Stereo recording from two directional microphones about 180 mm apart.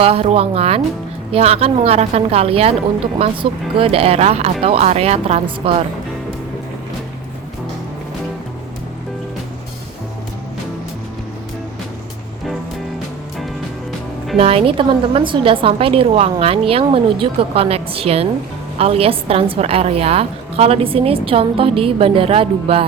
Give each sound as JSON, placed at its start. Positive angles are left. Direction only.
{"t": 0.0, "sound": "a woman's voice", "side_deg": -35}
{"t": 14.3, "sound": "a woman's voice", "side_deg": -35}